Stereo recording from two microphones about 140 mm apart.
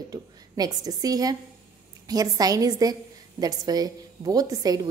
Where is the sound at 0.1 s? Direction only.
25° right (ahead or behind).